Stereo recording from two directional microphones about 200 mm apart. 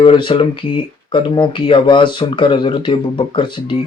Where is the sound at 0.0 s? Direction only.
25° left (ahead or behind).